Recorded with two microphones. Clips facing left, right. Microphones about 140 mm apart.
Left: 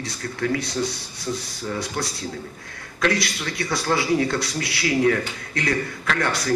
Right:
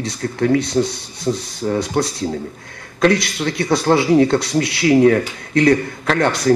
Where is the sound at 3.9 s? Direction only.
45° right (ahead or behind).